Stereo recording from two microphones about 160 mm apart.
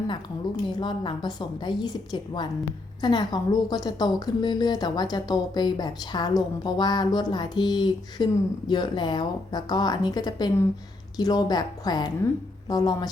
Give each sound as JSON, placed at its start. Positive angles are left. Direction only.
{"t": 0.7, "sound": "a woman's voice", "side_deg": 30}